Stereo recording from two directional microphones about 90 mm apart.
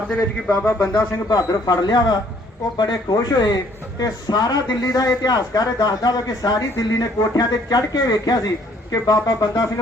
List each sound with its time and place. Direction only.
0.6 s speech: 25° left (ahead or behind)
1.3 s a man's voice: 45° left (ahead or behind)